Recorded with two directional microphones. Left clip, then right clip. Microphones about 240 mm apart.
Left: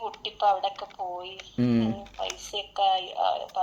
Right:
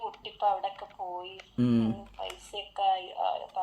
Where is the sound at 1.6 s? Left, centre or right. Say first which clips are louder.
Left 2 dB; centre.